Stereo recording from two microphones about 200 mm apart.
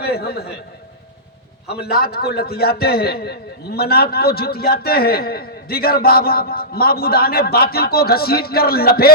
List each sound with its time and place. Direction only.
0.0 s a man's voice: 50° left (ahead or behind)
1.7 s a man's voice: 50° left (ahead or behind)